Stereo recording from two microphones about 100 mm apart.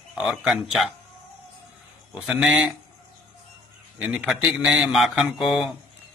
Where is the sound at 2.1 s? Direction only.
5° right (ahead or behind).